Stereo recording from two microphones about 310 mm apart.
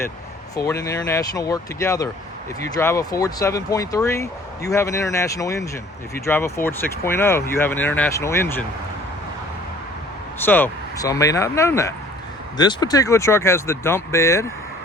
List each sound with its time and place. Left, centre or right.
0.5 s speech: centre
10.4 s speech: centre